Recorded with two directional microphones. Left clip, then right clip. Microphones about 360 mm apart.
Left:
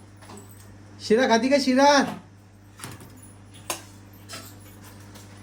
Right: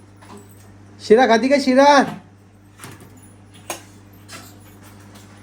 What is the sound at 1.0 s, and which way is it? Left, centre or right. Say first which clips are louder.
Speech: right 7 dB; centre.